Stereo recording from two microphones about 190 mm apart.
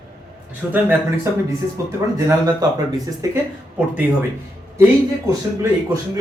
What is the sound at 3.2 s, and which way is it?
Speech, 15° right (ahead or behind).